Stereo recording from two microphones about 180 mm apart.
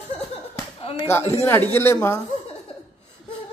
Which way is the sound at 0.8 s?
30° left (ahead or behind).